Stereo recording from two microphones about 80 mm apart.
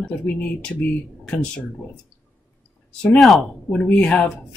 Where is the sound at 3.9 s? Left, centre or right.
Centre.